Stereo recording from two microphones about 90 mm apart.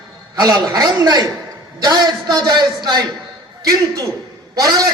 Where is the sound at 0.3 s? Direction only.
45° right (ahead or behind).